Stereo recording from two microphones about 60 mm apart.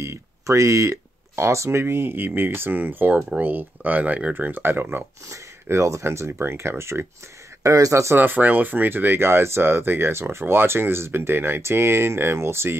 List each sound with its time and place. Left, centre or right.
0.0 s speech: right
5.3 s speech: right
7.6 s speech: right
8.2 s speech: right